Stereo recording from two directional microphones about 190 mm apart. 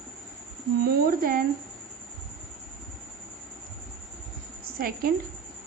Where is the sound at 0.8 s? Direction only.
50° right (ahead or behind).